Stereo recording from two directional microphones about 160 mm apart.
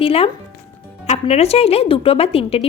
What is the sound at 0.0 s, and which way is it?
Speech, 35° left (ahead or behind).